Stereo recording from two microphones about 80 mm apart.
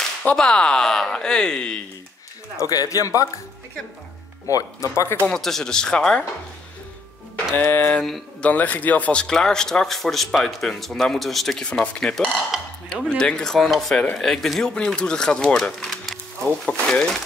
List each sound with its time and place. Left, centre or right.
0.2 s speech: centre
2.5 s speech: left
4.5 s speech: left
5.2 s speech: centre
7.5 s speech: left